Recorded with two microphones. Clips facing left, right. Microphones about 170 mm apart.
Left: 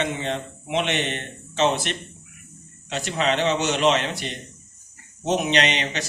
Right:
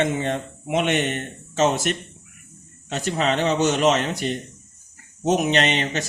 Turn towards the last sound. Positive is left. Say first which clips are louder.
# right 2 dB
turn(degrees=-45)  # may be behind; listen again after turning